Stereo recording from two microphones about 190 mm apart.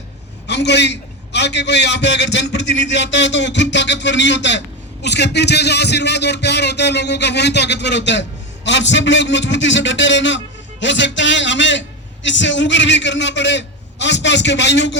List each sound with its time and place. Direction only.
0.4 s a man's voice: 65° left (ahead or behind)